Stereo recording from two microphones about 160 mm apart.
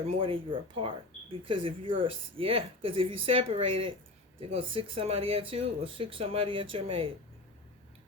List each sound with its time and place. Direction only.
0.2 s speech: 35° right (ahead or behind)